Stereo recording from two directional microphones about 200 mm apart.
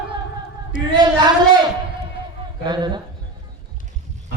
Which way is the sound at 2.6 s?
20° right (ahead or behind).